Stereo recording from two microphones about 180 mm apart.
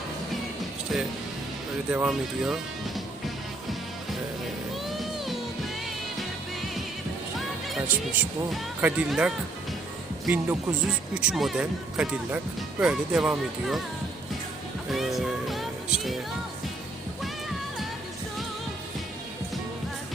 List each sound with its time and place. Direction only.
1.9 s speech: 5° right (ahead or behind)
4.9 s music: centre (ahead or behind)
8.2 s speech: 10° right (ahead or behind)
14.9 s music: centre (ahead or behind)